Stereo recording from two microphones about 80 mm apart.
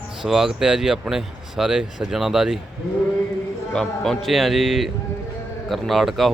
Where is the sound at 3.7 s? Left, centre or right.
Centre.